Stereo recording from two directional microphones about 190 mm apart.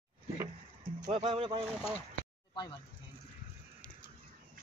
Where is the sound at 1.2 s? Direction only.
30° right (ahead or behind).